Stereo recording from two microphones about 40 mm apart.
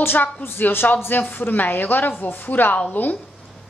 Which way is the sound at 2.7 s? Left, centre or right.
Left.